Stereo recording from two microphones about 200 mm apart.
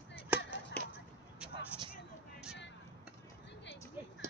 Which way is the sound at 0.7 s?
10° left (ahead or behind).